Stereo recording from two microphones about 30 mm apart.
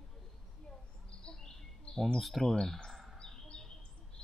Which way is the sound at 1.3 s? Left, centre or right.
Centre.